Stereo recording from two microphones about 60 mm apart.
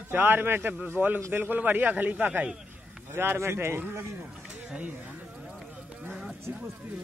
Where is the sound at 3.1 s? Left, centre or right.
Right.